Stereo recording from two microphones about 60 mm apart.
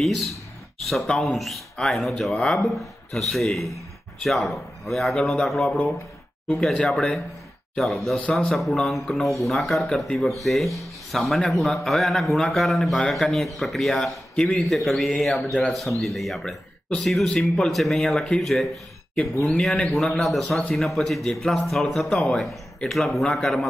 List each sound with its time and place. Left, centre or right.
0.0 s speech: centre
8.2 s a man's voice: left
8.5 s speech: centre
20.2 s speech: centre